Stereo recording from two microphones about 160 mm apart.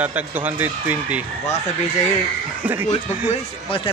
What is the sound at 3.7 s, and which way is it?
Speech, 35° left (ahead or behind).